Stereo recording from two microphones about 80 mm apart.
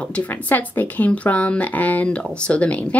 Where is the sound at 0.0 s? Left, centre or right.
Centre.